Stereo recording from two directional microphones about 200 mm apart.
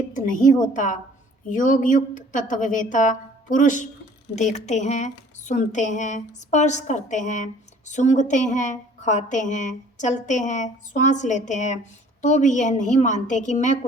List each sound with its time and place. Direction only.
0.1 s a woman's voice: 40° left (ahead or behind)